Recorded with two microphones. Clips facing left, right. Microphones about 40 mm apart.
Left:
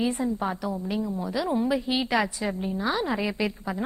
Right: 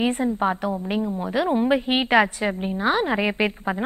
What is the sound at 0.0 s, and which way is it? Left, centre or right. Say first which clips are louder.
A woman's voice: right 5 dB; right.